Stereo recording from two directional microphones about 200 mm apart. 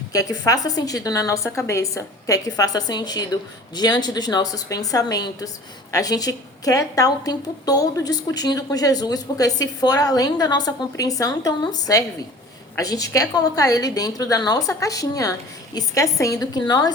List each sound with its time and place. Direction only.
0.1 s a woman's voice: 15° left (ahead or behind)